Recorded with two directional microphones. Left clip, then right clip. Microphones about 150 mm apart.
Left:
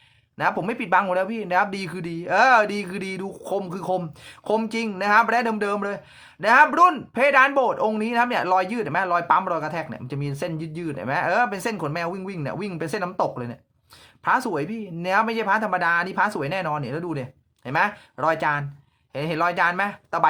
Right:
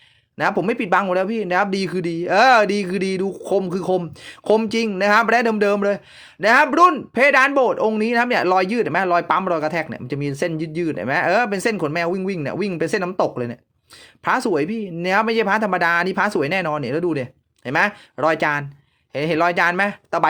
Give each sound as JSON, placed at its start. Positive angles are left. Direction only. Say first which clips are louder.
{"t": 0.3, "sound": "speech", "louder": "right 4 dB", "side_deg": -35}